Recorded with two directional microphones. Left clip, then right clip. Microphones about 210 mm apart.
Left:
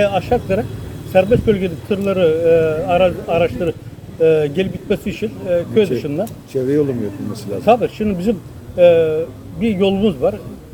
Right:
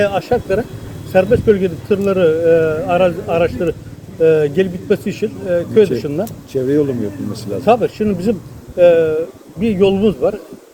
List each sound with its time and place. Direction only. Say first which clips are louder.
0.0 s speech: even; 15° right (ahead or behind)
6.5 s speech: right 1 dB; 20° left (ahead or behind)
7.6 s speech: right 1 dB; 15° right (ahead or behind)